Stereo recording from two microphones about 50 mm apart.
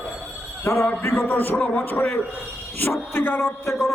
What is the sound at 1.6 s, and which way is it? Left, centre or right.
Speech, left.